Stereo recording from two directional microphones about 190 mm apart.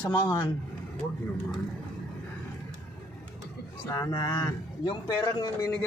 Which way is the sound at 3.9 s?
20° left (ahead or behind).